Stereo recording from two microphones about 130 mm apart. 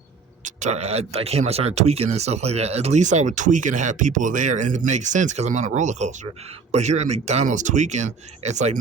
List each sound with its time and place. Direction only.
0.4 s speech: 65° right (ahead or behind)